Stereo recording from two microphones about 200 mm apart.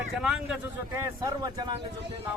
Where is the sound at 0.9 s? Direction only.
15° right (ahead or behind).